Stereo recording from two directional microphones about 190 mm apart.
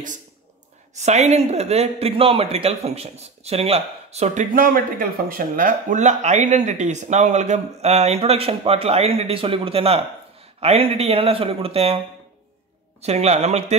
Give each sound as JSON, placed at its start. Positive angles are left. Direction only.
{"t": 0.9, "sound": "speech", "side_deg": -35}
{"t": 4.6, "sound": "speech", "side_deg": -50}
{"t": 13.0, "sound": "speech", "side_deg": -35}